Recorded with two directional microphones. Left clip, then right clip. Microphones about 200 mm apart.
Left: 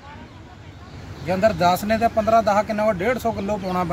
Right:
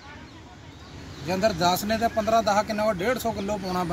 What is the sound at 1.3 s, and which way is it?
Speech, 20° left (ahead or behind).